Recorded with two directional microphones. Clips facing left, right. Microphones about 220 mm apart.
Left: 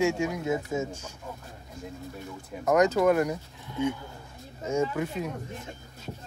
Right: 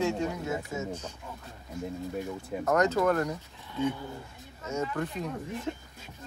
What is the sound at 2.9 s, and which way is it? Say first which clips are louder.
Speech: left 3 dB; 10° left (ahead or behind).